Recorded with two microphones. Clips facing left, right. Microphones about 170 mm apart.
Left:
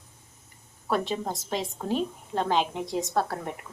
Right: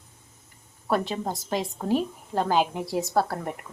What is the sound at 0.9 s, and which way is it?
A woman's voice, centre (ahead or behind).